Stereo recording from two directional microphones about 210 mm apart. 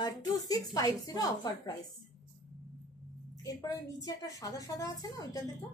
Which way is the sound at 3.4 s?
15° left (ahead or behind).